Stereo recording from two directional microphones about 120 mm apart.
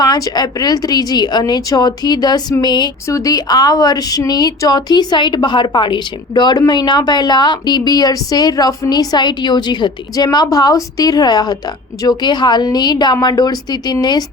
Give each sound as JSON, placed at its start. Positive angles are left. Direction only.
{"t": 0.0, "sound": "speech", "side_deg": 35}